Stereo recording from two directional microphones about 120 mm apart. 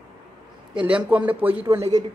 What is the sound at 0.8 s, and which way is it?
Speech, 10° right (ahead or behind).